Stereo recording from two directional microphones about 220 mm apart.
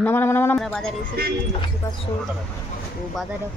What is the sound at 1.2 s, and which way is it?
Speech, 45° right (ahead or behind).